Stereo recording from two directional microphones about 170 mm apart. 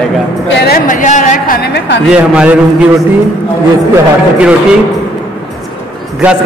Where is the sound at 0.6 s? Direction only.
55° left (ahead or behind).